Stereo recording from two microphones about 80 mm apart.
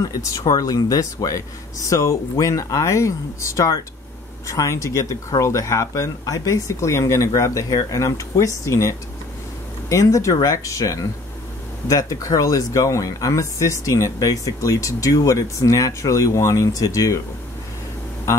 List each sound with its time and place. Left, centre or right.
0.0 s speech: left